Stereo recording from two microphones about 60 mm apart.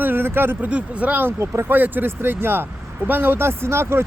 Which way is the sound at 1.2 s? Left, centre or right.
Right.